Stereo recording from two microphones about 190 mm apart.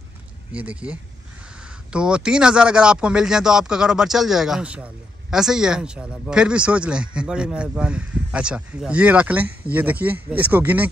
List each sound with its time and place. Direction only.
0.5 s speech: 5° right (ahead or behind)